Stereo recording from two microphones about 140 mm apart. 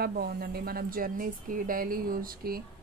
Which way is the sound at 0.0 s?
90° right.